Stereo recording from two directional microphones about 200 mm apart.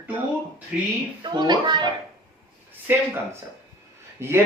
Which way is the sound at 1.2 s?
20° right (ahead or behind).